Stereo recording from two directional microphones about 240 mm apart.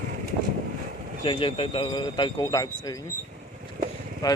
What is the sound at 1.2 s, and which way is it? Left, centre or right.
Speech, left.